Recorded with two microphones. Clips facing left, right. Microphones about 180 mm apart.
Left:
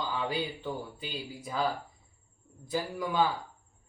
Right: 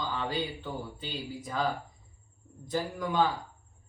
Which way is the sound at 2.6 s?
5° left (ahead or behind).